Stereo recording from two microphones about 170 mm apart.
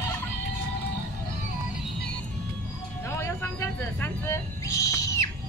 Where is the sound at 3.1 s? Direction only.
15° left (ahead or behind).